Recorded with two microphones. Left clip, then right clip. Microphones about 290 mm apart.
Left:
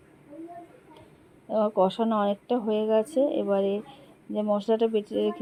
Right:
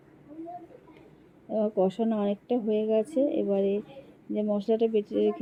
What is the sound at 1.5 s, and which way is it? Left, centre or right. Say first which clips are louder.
Speech: left 3 dB; left.